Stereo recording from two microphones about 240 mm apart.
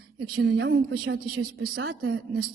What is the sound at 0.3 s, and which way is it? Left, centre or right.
A woman's voice, right.